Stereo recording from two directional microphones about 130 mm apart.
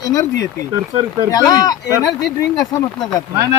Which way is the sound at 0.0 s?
25° left (ahead or behind).